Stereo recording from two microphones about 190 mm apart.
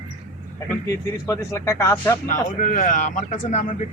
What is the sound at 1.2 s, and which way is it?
Speech, 15° left (ahead or behind).